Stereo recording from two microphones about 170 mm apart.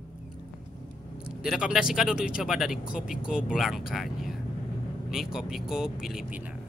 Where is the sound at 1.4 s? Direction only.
5° right (ahead or behind).